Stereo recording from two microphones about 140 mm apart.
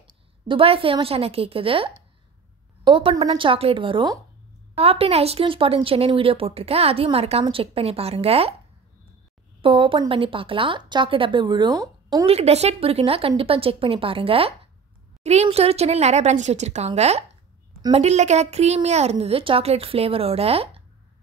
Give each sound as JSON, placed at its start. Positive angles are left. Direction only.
{"t": 0.5, "sound": "a woman's voice", "side_deg": -40}
{"t": 9.6, "sound": "speech", "side_deg": -40}
{"t": 12.3, "sound": "a woman's voice", "side_deg": -50}